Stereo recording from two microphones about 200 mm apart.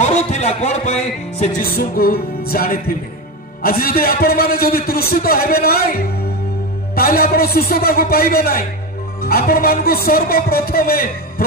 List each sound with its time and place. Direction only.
0.0 s speech: 35° left (ahead or behind)
1.6 s a man's voice: 50° left (ahead or behind)